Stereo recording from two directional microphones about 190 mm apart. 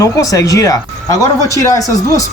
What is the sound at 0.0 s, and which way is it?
Speech, 15° left (ahead or behind).